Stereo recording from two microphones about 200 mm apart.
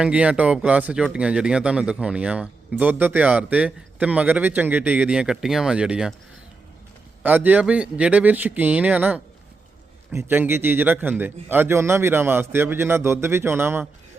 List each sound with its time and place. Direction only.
0.0 s speech: 5° right (ahead or behind)
7.2 s a man's voice: 10° right (ahead or behind)